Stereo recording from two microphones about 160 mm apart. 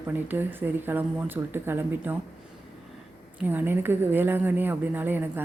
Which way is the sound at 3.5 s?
10° right (ahead or behind).